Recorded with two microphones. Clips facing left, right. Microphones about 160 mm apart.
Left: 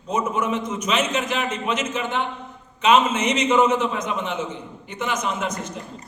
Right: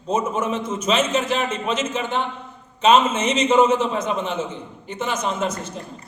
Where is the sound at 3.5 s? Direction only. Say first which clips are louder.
Right 2 dB; 25° right (ahead or behind).